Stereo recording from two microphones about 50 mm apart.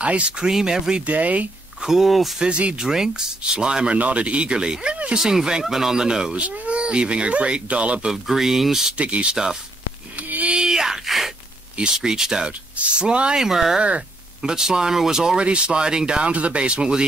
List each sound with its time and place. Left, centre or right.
0.0 s speech: right
0.5 s speech: centre
1.0 s speech: right
1.8 s speech: centre
2.3 s speech: right
6.3 s speech: right
8.1 s speech: centre
8.9 s speech: right
10.3 s a sound: right
10.6 s a sound: centre
11.9 s speech: centre
13.4 s speech: centre
13.7 s a sound: right
14.5 s speech: centre